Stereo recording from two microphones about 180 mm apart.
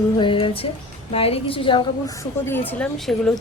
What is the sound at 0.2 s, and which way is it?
A woman's voice, 30° left (ahead or behind).